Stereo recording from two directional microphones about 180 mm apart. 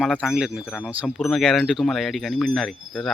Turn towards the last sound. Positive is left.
turn(degrees=0)  # may be behind; listen again after turning